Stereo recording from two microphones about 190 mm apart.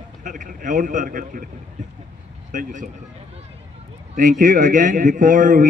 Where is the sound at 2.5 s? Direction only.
40° right (ahead or behind).